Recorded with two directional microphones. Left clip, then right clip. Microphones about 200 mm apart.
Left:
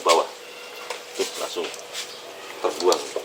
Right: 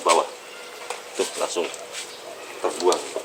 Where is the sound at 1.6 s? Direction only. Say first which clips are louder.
Right 2 dB; 30° right (ahead or behind).